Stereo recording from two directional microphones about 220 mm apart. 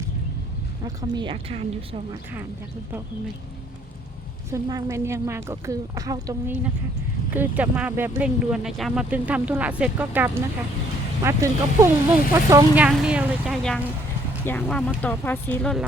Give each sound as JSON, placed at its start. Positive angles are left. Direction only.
{"t": 0.9, "sound": "speech", "side_deg": -20}
{"t": 4.5, "sound": "speech", "side_deg": -15}